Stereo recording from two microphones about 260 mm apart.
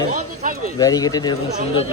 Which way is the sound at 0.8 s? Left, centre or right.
Centre.